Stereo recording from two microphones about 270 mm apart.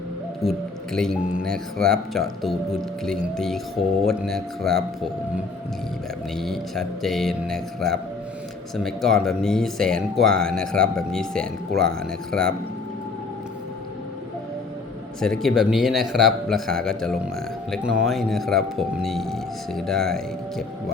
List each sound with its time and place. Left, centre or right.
0.9 s speech: centre
6.3 s speech: centre
15.2 s speech: centre